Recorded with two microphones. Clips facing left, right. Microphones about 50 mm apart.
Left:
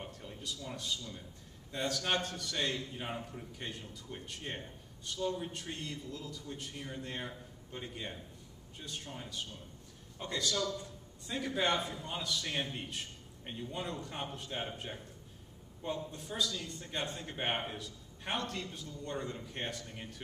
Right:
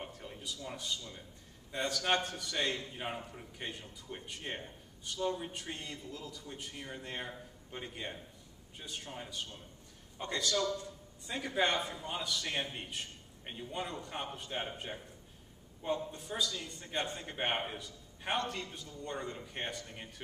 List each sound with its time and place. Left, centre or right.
0.0 s a man's voice: centre